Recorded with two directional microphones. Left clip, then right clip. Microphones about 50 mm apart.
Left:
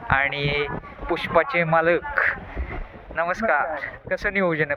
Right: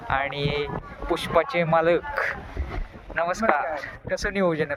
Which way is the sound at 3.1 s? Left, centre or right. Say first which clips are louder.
Left 1 dB; right.